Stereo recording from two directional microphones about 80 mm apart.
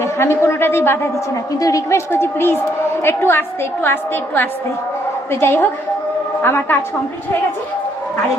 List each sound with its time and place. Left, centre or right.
0.0 s a woman's voice: left
1.5 s a woman's voice: left